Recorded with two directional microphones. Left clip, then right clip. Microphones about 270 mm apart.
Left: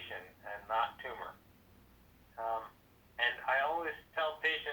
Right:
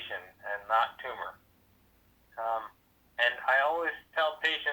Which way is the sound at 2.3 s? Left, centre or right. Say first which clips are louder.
Right 5 dB; right.